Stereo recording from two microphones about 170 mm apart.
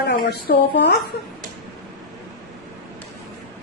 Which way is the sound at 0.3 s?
65° left (ahead or behind).